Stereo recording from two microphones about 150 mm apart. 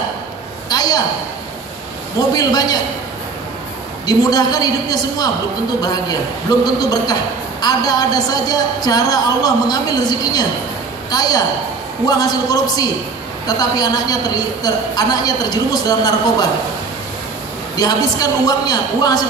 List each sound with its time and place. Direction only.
0.7 s a sound: 25° left (ahead or behind)
2.3 s a woman's voice: 25° left (ahead or behind)
4.0 s a woman's voice: 25° left (ahead or behind)
6.6 s a woman's voice: 25° left (ahead or behind)
17.7 s a woman's voice: 25° left (ahead or behind)